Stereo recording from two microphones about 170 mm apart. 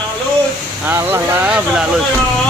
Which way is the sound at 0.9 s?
15° right (ahead or behind).